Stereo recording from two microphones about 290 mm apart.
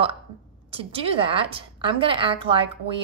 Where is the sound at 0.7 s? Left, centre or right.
Centre.